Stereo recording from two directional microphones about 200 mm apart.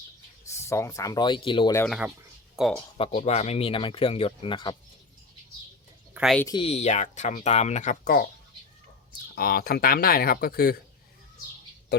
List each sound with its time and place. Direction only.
0.4 s speech: 15° left (ahead or behind)
1.9 s speech: 5° right (ahead or behind)
3.2 s speech: 35° left (ahead or behind)
6.1 s speech: centre (ahead or behind)
6.4 s speech: 25° left (ahead or behind); by 8.3 s 50° left (ahead or behind)
9.3 s speech: 50° left (ahead or behind)